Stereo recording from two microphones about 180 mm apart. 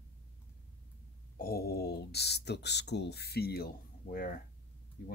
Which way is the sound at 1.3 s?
55° left (ahead or behind).